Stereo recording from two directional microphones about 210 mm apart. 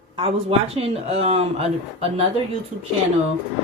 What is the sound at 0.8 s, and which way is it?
Speech, 30° right (ahead or behind).